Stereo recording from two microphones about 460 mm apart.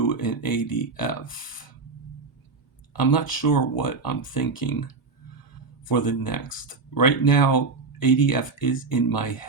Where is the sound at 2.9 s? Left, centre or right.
Left.